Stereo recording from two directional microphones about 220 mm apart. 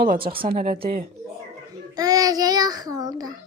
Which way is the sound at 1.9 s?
15° right (ahead or behind).